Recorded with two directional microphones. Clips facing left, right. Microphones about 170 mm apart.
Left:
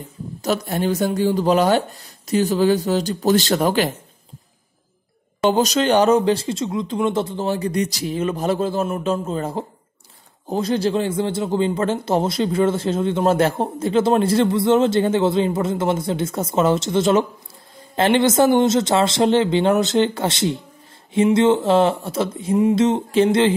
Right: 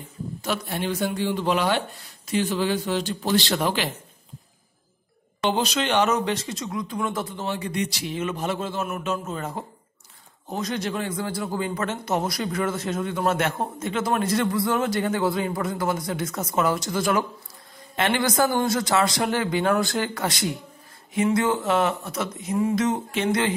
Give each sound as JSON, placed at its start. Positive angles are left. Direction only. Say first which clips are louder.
{"t": 0.4, "sound": "speech", "louder": "left 7 dB", "side_deg": 40}
{"t": 5.4, "sound": "a man's voice", "louder": "left 7 dB", "side_deg": 40}